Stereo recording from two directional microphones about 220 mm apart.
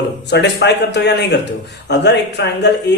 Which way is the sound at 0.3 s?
50° left (ahead or behind).